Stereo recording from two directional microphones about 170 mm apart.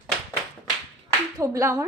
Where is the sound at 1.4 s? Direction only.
15° right (ahead or behind).